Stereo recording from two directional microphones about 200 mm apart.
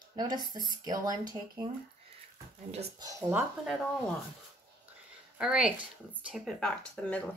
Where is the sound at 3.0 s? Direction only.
15° right (ahead or behind).